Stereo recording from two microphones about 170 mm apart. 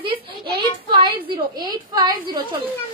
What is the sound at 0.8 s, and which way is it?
A woman's voice, 30° right (ahead or behind).